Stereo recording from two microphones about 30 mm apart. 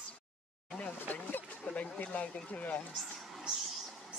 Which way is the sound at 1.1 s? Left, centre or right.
Left.